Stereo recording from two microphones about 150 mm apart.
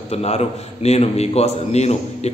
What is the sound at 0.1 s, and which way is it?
A man's voice, 45° left (ahead or behind).